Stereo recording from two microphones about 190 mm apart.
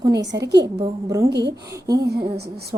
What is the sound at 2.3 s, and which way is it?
Speech, 60° right (ahead or behind).